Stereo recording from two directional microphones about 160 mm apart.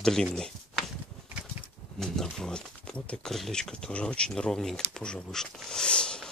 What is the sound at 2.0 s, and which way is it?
Speech, centre (ahead or behind).